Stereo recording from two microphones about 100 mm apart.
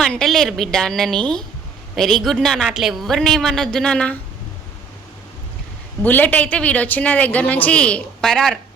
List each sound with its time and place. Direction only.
0.0 s a woman's voice: 5° left (ahead or behind)
6.0 s a woman's voice: 15° left (ahead or behind)